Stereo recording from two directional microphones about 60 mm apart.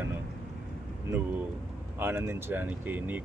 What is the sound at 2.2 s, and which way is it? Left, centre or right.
Speech, right.